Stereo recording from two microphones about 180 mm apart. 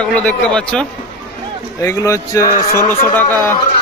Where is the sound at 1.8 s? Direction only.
20° left (ahead or behind).